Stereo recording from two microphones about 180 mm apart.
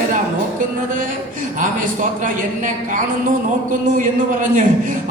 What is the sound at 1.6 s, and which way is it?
A man's voice, 45° right (ahead or behind).